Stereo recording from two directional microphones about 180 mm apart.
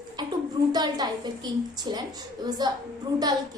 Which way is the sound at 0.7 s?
20° right (ahead or behind).